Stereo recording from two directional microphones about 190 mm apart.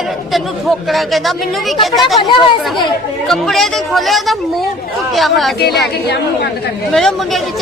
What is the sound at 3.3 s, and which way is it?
A woman's voice, centre (ahead or behind).